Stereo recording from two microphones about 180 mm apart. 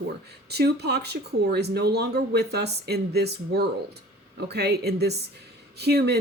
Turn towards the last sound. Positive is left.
turn(degrees=-65)  # may be behind; listen again after turning